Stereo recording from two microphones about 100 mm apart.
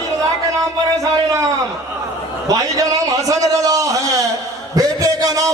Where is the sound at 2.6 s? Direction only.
35° right (ahead or behind).